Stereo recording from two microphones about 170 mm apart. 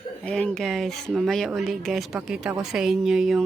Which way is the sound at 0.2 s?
5° left (ahead or behind).